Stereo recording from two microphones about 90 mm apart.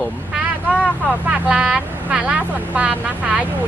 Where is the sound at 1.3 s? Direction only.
10° right (ahead or behind).